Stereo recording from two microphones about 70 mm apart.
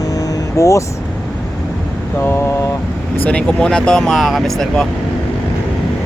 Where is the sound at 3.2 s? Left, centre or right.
Centre.